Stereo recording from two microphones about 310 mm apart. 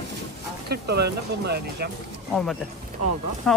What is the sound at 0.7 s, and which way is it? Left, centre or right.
Speech, right.